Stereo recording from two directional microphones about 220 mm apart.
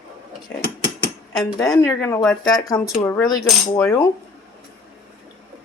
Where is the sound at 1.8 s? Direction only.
10° left (ahead or behind).